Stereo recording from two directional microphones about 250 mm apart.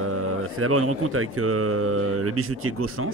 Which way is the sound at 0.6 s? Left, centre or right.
Right.